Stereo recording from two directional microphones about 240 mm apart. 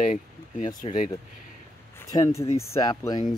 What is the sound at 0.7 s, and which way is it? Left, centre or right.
Speech, centre.